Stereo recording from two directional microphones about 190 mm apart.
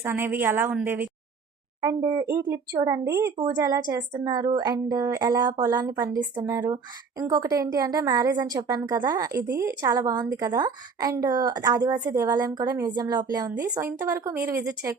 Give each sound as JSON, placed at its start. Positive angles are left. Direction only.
{"t": 0.0, "sound": "speech", "side_deg": -10}
{"t": 1.8, "sound": "a woman's voice", "side_deg": -20}
{"t": 5.9, "sound": "a woman's voice", "side_deg": -10}